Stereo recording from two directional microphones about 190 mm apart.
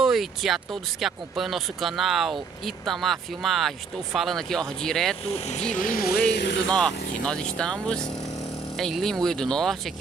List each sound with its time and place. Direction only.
0.0 s a sound: centre (ahead or behind)
1.0 s speech: centre (ahead or behind)
5.2 s speech: 30° left (ahead or behind)
5.8 s speech: 50° left (ahead or behind); by 6.7 s 70° left (ahead or behind)
6.7 s speech: 5° left (ahead or behind)